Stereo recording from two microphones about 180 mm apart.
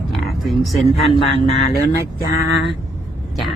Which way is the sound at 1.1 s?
35° left (ahead or behind).